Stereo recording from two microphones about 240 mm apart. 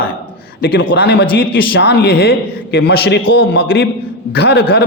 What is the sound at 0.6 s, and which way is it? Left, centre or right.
A man's voice, left.